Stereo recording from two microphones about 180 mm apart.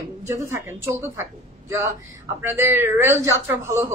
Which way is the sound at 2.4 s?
15° right (ahead or behind).